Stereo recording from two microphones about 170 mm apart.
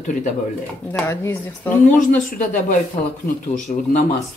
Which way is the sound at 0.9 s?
15° left (ahead or behind).